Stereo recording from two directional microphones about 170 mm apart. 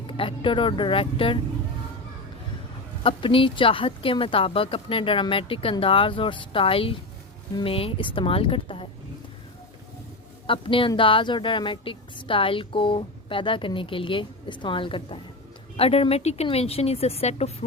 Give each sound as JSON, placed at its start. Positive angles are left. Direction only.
{"t": 0.1, "sound": "speech", "side_deg": 30}
{"t": 3.0, "sound": "speech", "side_deg": 30}
{"t": 10.4, "sound": "a woman's voice", "side_deg": 30}